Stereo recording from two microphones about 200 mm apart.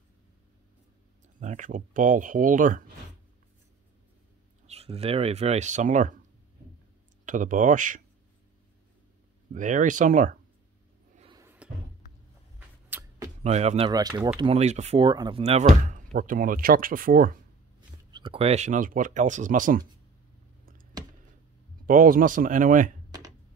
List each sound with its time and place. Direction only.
1.4 s speech: 40° right (ahead or behind)
4.6 s speech: 30° right (ahead or behind)
7.2 s speech: 40° right (ahead or behind)
9.5 s speech: 40° right (ahead or behind)
11.6 s a sound: 5° right (ahead or behind)
13.4 s speech: 35° right (ahead or behind)
13.8 s speech: 20° right (ahead or behind)
14.4 s speech: 30° right (ahead or behind)
17.7 s speech: 25° right (ahead or behind); by 19.9 s 40° right (ahead or behind)
21.8 s speech: 45° right (ahead or behind)